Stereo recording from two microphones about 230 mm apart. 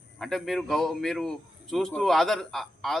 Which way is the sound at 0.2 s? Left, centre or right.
Centre.